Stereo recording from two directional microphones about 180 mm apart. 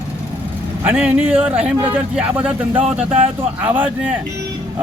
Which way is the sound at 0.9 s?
10° right (ahead or behind).